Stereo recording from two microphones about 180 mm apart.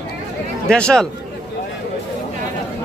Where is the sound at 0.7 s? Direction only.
5° left (ahead or behind).